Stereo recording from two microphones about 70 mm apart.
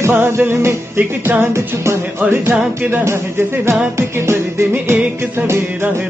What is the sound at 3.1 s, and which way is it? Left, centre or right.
Music, right.